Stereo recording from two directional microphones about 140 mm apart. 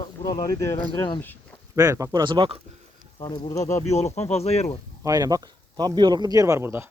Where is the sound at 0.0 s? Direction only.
30° left (ahead or behind).